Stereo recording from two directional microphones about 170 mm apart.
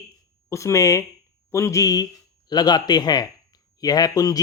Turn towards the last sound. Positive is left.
turn(degrees=20)  # may be behind; listen again after turning